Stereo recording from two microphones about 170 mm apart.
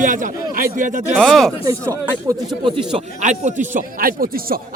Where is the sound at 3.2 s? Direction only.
45° right (ahead or behind).